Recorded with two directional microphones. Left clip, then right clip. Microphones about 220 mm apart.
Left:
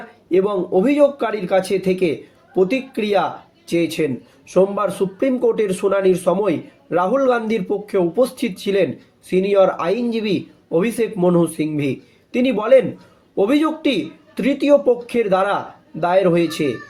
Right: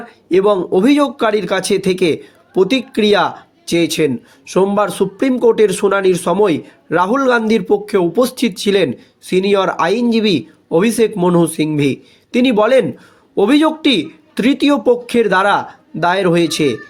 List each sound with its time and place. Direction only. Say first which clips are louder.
0.3 s speech: right 5 dB; 50° right (ahead or behind)